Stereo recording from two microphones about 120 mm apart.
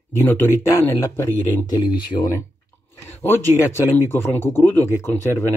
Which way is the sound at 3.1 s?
20° left (ahead or behind).